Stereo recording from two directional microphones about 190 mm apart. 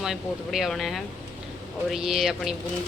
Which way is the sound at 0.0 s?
Centre (ahead or behind).